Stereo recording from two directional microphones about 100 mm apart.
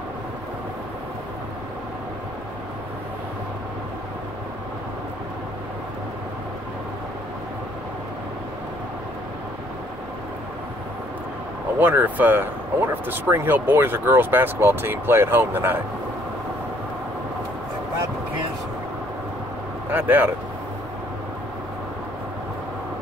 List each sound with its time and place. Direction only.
11.8 s speech: 20° right (ahead or behind)
19.9 s speech: 20° right (ahead or behind)